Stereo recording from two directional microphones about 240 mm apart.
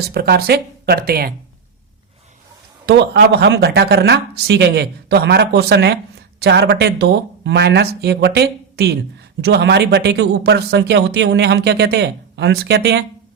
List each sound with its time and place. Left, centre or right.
0.0 s speech: right
2.8 s speech: right